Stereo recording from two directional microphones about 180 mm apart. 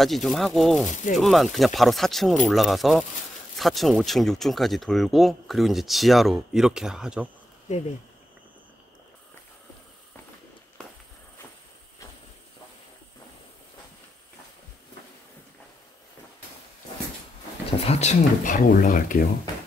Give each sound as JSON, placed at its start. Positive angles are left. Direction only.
{"t": 0.0, "sound": "speech", "side_deg": 0}
{"t": 0.8, "sound": "speech", "side_deg": 45}
{"t": 1.1, "sound": "speech", "side_deg": 0}
{"t": 7.7, "sound": "speech", "side_deg": 40}
{"t": 17.7, "sound": "speech", "side_deg": 35}